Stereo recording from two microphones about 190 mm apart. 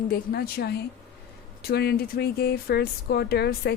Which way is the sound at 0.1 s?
55° left (ahead or behind).